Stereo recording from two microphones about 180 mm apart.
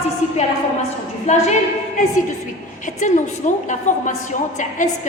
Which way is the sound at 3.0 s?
45° left (ahead or behind).